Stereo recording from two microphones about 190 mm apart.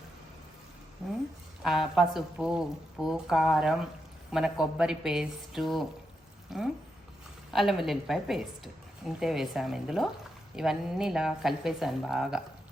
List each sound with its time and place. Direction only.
1.6 s a woman's voice: centre (ahead or behind)